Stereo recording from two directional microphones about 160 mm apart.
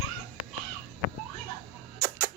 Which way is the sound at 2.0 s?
20° right (ahead or behind).